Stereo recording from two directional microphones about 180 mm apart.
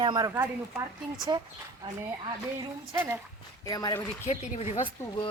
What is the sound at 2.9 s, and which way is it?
Speech, 15° right (ahead or behind).